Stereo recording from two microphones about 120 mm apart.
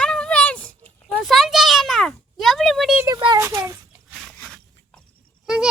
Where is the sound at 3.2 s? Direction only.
40° right (ahead or behind).